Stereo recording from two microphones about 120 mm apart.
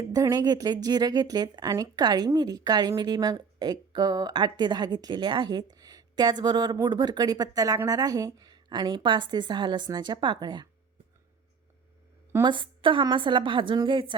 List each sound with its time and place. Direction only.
0.0 s speech: 30° right (ahead or behind)
12.4 s a woman's voice: 40° right (ahead or behind)